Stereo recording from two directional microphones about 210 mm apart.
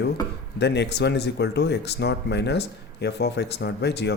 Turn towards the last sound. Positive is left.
turn(degrees=55)  # may be behind; listen again after turning